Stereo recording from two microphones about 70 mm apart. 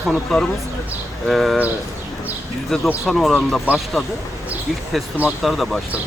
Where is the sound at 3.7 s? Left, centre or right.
Right.